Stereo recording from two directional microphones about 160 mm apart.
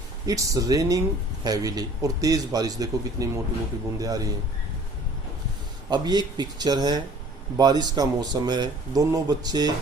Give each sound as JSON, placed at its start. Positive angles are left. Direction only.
{"t": 0.3, "sound": "speech", "side_deg": -20}
{"t": 5.9, "sound": "speech", "side_deg": -25}